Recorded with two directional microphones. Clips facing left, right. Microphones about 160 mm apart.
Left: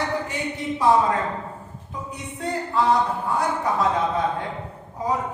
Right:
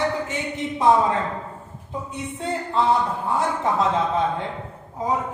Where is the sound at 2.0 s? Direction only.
25° right (ahead or behind).